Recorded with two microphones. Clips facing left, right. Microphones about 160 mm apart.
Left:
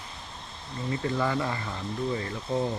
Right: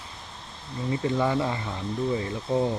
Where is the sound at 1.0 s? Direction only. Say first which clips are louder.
Right 3 dB; 20° right (ahead or behind).